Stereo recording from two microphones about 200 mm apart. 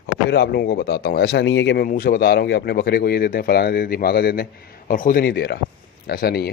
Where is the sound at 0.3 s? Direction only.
55° left (ahead or behind).